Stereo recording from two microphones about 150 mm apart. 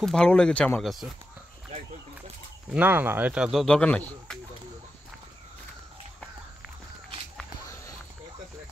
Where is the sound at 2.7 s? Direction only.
10° right (ahead or behind).